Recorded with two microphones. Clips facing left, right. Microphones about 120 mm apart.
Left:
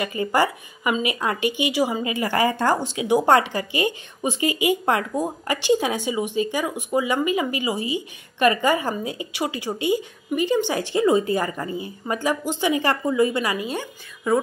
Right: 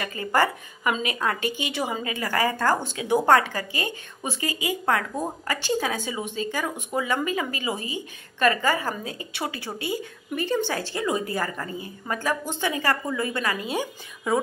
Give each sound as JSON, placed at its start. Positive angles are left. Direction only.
{"t": 0.0, "sound": "a woman's voice", "side_deg": 15}